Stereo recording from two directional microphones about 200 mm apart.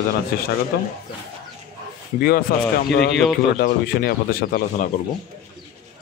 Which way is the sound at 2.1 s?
50° left (ahead or behind).